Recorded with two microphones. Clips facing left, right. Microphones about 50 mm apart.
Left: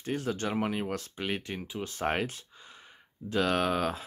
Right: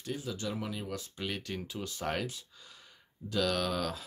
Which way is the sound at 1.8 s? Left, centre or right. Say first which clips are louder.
Left 5 dB; left.